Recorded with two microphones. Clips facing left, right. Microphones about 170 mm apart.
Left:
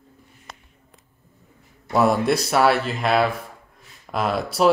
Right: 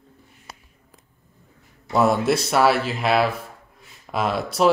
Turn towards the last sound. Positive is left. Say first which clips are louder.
# even
turn(degrees=0)  # may be behind; listen again after turning